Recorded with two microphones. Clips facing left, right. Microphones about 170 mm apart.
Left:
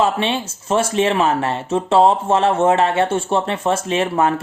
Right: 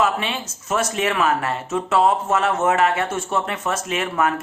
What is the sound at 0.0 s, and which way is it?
Speech, 30° left (ahead or behind).